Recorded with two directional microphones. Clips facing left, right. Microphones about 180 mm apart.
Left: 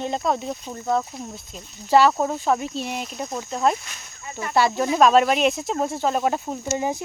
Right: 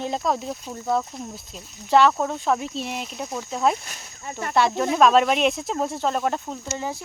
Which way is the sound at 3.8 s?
45° right (ahead or behind).